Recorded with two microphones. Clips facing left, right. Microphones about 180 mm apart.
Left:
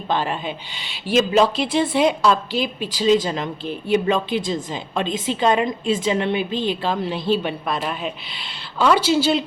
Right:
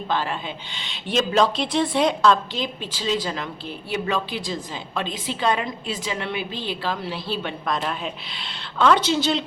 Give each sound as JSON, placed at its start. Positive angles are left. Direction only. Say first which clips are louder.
{"t": 0.1, "sound": "a woman's voice", "louder": "left 4 dB", "side_deg": 20}
{"t": 7.8, "sound": "a woman's voice", "louder": "left 2 dB", "side_deg": 5}